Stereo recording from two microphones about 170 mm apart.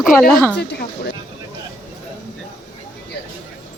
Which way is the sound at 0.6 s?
75° left (ahead or behind).